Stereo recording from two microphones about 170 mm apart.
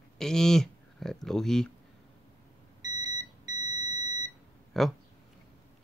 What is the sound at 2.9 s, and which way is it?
Beep, 20° right (ahead or behind).